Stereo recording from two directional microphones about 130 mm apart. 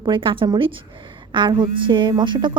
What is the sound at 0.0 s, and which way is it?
A woman's voice, 40° right (ahead or behind).